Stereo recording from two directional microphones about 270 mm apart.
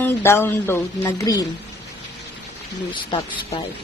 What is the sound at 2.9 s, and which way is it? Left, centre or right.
Speech, centre.